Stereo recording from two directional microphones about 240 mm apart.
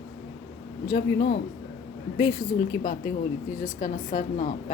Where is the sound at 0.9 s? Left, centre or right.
Left.